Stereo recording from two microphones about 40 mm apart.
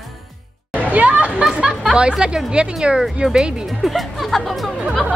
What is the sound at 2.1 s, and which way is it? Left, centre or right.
A woman's voice, right.